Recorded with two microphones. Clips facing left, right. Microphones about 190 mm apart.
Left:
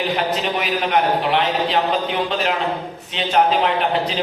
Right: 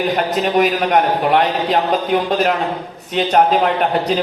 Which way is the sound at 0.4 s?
45° right (ahead or behind).